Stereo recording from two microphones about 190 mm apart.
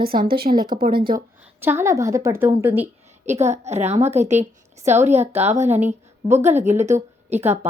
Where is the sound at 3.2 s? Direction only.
35° right (ahead or behind).